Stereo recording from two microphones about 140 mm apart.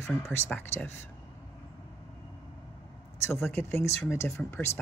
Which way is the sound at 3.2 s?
15° left (ahead or behind).